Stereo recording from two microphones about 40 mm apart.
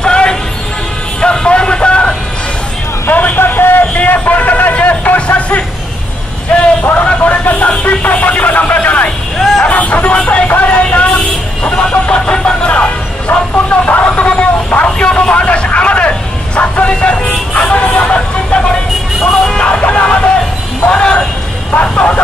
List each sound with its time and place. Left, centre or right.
0.0 s music: left
1.2 s vehicle: left
3.1 s vehicle: left
3.3 s a sound: left
3.9 s a sound: left
4.7 s music: left
6.6 s a sound: left
7.8 s music: left
8.8 s vehicle: left
9.7 s music: left
10.2 s vehicle: left
19.6 s music: left
21.9 s vehicle: left